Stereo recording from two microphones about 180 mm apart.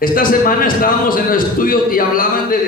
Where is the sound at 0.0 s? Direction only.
50° left (ahead or behind).